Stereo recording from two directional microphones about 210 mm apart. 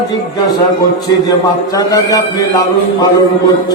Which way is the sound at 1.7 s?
15° left (ahead or behind).